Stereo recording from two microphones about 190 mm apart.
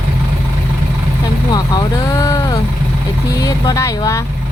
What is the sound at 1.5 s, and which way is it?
Vehicle, 20° left (ahead or behind).